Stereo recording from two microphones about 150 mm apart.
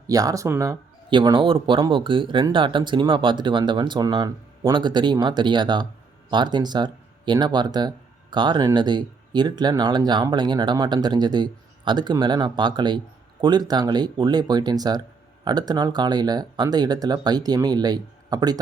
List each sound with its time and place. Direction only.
0.1 s speech: 25° right (ahead or behind)